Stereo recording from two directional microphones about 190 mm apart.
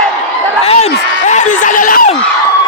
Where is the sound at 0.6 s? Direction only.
35° left (ahead or behind).